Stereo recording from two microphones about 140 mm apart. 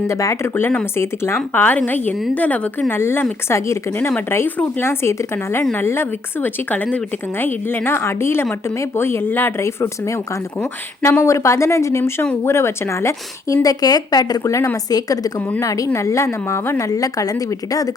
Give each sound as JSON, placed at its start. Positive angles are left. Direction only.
{"t": 0.1, "sound": "a woman's voice", "side_deg": 20}
{"t": 15.4, "sound": "a woman's voice", "side_deg": 10}
{"t": 15.6, "sound": "a woman's voice", "side_deg": 25}